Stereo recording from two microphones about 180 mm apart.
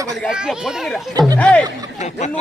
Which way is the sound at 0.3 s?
5° right (ahead or behind).